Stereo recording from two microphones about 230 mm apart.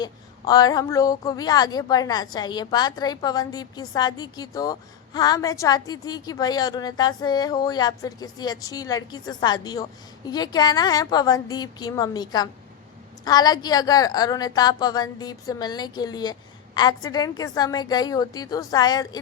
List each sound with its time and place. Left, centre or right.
0.0 s a woman's voice: centre